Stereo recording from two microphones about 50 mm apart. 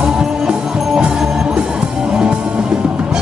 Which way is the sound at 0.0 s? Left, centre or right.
Centre.